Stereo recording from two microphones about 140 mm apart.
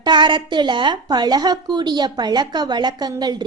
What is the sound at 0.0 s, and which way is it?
A woman's voice, 35° right (ahead or behind).